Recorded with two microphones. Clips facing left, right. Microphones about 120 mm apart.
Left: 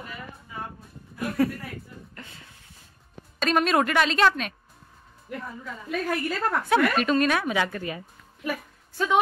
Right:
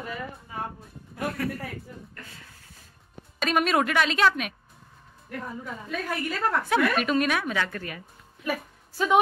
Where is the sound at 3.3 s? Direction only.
5° right (ahead or behind).